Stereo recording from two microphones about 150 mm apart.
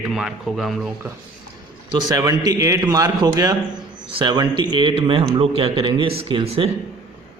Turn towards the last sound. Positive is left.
turn(degrees=-40)  # may be behind; listen again after turning